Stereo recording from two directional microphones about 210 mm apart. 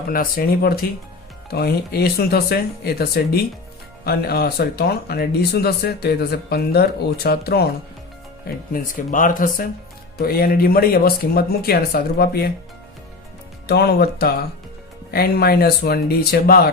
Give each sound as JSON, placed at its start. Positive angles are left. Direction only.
{"t": 0.1, "sound": "speech", "side_deg": 45}
{"t": 13.7, "sound": "speech", "side_deg": 50}